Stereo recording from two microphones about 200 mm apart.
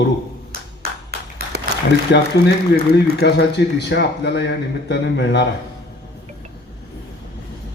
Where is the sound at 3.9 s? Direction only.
60° left (ahead or behind).